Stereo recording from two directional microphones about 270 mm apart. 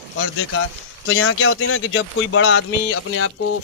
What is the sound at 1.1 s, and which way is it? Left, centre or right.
Speech, left.